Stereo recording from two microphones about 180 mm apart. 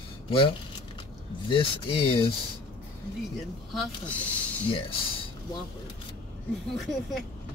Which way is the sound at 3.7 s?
5° left (ahead or behind).